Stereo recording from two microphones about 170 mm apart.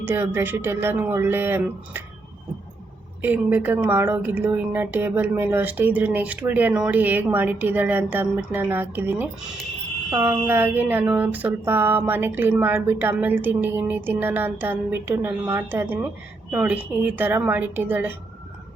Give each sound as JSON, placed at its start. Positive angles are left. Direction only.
{"t": 0.0, "sound": "speech", "side_deg": -10}
{"t": 3.2, "sound": "speech", "side_deg": -10}